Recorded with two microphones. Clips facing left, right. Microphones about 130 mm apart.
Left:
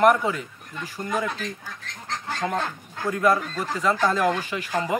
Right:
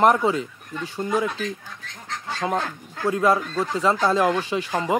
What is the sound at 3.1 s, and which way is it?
Speech, 25° right (ahead or behind).